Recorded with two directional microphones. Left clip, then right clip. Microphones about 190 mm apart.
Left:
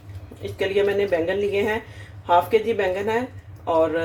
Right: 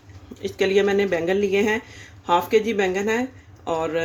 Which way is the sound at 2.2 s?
50° right (ahead or behind).